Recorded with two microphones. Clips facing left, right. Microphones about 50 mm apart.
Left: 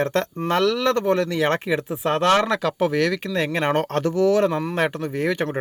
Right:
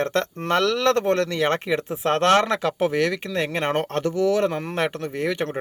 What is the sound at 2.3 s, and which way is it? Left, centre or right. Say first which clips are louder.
Speech: even; right.